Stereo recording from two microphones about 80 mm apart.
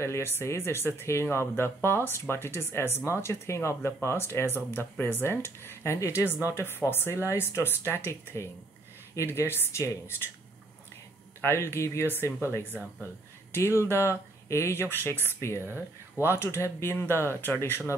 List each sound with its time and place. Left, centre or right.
0.0 s speech: left
9.1 s speech: left
11.4 s speech: left
13.5 s speech: left